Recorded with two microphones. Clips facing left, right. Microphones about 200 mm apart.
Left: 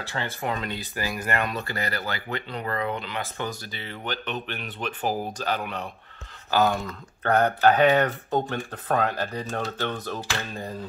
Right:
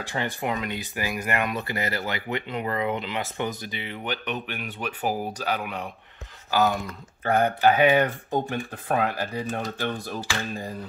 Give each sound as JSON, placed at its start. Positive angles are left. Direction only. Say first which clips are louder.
{"t": 0.0, "sound": "speech", "louder": "right 2 dB", "side_deg": -15}